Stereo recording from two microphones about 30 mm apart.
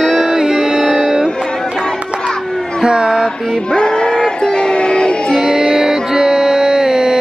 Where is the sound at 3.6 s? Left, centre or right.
Left.